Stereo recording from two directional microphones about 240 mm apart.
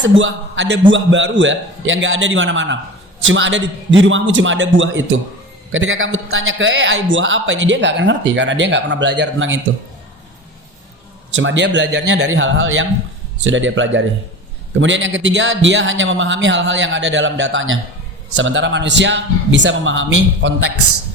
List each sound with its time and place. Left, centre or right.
0.0 s a man's voice: right
11.3 s a man's voice: right